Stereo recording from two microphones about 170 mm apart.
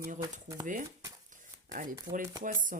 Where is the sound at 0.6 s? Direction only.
50° right (ahead or behind).